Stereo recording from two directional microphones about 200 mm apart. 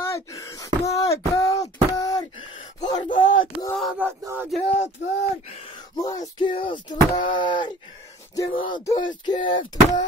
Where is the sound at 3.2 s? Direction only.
75° left (ahead or behind).